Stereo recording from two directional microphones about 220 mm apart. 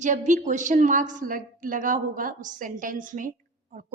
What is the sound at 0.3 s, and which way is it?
A woman's voice, 35° right (ahead or behind).